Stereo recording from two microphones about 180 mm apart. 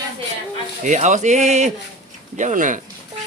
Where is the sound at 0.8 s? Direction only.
40° right (ahead or behind).